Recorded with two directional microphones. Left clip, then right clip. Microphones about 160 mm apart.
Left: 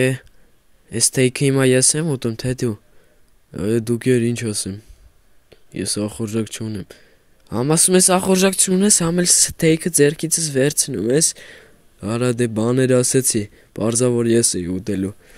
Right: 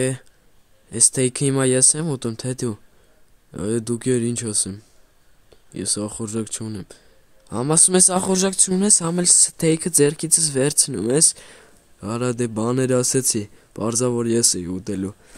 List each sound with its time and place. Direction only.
0.0 s speech: 25° left (ahead or behind)